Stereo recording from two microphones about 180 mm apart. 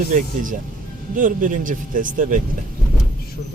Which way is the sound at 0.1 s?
45° right (ahead or behind).